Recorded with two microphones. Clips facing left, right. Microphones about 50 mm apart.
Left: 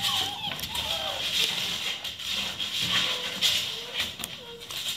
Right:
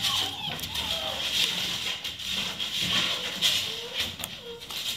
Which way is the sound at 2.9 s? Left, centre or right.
Centre.